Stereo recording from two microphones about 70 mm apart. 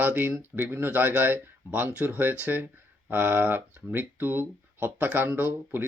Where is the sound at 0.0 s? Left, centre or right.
Right.